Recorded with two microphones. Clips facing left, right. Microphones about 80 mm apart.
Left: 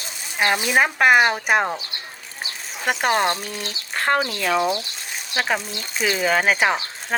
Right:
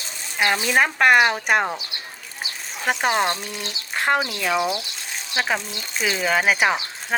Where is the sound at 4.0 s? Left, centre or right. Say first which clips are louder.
Even; centre.